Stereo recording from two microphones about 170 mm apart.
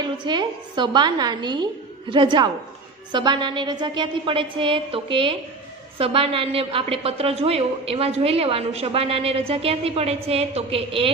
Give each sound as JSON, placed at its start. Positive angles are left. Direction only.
{"t": 0.0, "sound": "a woman's voice", "side_deg": -25}